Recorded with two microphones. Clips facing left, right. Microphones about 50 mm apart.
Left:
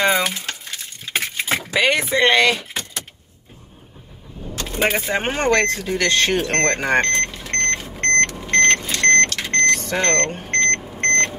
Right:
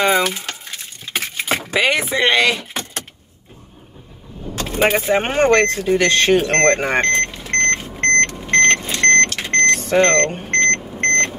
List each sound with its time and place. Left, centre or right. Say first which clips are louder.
0.0 s speech: right 2 dB; centre
2.7 s vehicle: right 2 dB; right
4.6 s vehicle: right 4 dB; right
5.0 s speech: right 5 dB; centre
6.5 s speech: right 5 dB; right
7.0 s vehicle: right 2 dB; right
9.9 s speech: right 9 dB; right
10.5 s vehicle: right 2 dB; right